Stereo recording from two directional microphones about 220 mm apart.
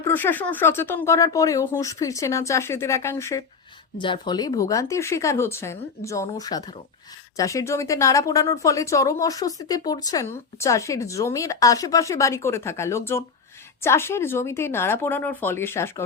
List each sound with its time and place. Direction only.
0.0 s speech: 10° left (ahead or behind)